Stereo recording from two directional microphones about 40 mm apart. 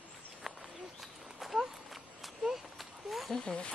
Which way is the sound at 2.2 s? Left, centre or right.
Centre.